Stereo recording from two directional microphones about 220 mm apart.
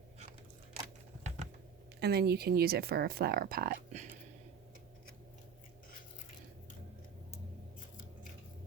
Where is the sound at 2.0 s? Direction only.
45° right (ahead or behind).